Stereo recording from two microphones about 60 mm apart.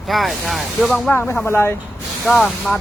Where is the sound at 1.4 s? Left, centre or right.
Left.